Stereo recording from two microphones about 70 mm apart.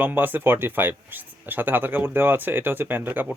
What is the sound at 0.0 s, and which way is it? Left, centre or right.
Speech, right.